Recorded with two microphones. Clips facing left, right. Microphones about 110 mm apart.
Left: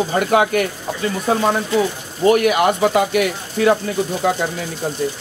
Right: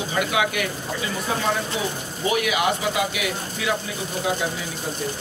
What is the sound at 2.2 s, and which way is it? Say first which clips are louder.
Speech: left 8 dB; 50° left (ahead or behind).